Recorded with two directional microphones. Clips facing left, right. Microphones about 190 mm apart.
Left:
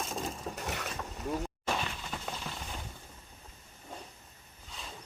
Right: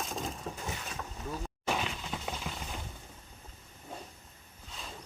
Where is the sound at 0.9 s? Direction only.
Centre (ahead or behind).